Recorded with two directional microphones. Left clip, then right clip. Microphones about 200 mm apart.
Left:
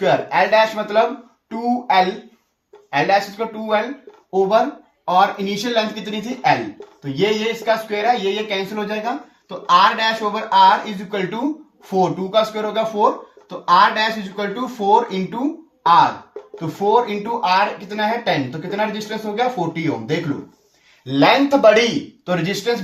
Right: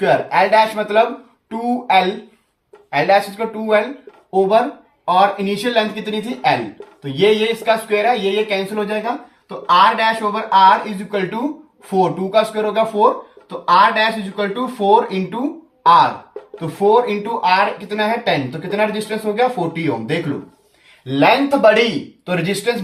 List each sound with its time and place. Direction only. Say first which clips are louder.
0.0 s speech: right 2 dB; 15° left (ahead or behind)